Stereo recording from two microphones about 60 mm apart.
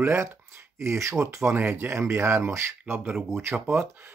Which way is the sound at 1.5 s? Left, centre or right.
Right.